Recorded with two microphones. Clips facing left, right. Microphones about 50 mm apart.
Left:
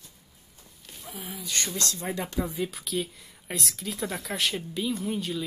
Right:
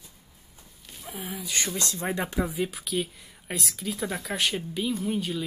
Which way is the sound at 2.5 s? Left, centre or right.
Centre.